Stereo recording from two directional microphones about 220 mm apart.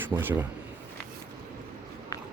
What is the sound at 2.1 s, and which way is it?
Biting, 15° left (ahead or behind).